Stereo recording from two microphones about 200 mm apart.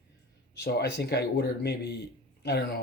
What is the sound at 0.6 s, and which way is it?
Speech, 55° left (ahead or behind).